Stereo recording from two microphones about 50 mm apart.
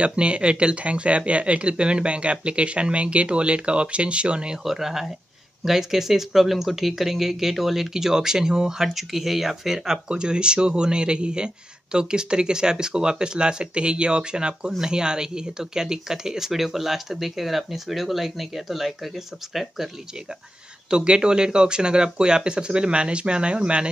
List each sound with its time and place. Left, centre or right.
0.0 s speech: right
4.6 s speech: centre
10.0 s speech: centre
20.9 s speech: centre